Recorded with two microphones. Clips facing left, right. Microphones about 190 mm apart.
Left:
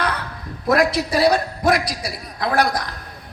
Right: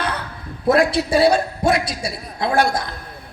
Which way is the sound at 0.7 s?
30° right (ahead or behind).